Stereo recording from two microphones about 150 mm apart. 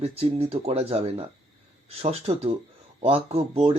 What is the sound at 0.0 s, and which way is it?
Speech, 40° right (ahead or behind).